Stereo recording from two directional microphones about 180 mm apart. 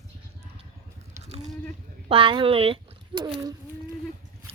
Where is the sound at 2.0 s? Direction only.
30° right (ahead or behind).